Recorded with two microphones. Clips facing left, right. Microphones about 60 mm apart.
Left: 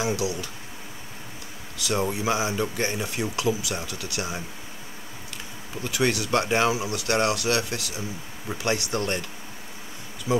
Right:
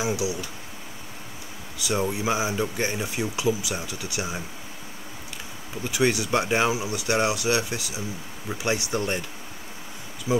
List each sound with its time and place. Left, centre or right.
0.0 s speech: centre
1.9 s speech: centre
5.9 s speech: centre
10.3 s speech: centre